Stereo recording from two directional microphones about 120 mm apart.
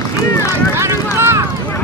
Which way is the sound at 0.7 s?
20° right (ahead or behind).